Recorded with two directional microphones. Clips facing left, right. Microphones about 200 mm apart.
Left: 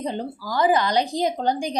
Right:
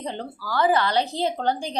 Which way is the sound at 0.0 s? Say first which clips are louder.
Left 4 dB; 15° left (ahead or behind).